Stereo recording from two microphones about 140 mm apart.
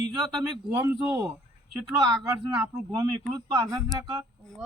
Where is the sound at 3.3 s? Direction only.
25° right (ahead or behind).